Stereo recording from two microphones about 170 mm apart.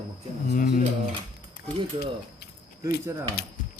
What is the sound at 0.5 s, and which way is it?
Speech, 55° left (ahead or behind).